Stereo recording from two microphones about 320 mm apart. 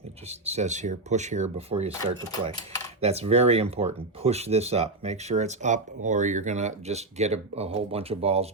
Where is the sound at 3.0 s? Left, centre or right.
Centre.